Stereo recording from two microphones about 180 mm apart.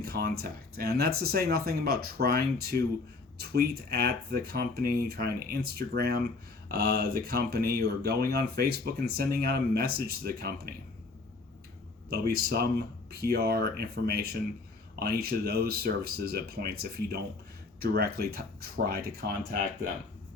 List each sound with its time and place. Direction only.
0.0 s speech: 55° right (ahead or behind)
12.1 s speech: 60° right (ahead or behind)